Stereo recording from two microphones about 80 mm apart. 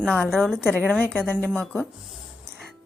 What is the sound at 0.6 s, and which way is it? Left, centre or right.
Speech, centre.